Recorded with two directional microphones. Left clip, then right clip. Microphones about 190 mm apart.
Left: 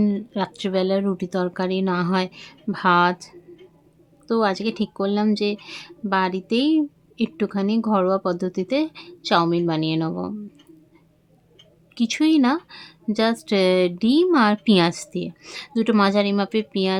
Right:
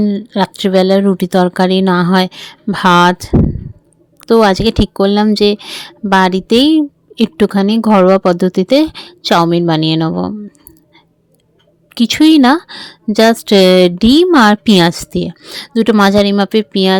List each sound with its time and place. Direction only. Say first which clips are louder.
0.3 s speech: right 12 dB; 40° right (ahead or behind)
11.9 s speech: right 11 dB; 40° right (ahead or behind)